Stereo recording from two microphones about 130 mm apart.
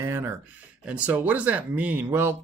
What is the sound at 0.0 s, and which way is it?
Speech, 20° right (ahead or behind).